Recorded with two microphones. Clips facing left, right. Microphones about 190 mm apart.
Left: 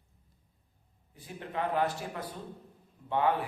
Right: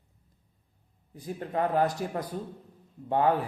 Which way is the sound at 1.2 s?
40° right (ahead or behind).